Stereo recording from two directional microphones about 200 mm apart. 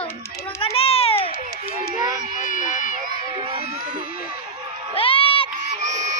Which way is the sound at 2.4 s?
40° left (ahead or behind).